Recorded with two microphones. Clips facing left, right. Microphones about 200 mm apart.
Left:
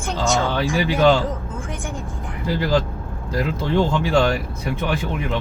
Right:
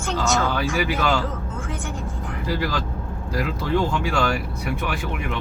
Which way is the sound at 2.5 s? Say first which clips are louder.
Left 6 dB; 25° left (ahead or behind).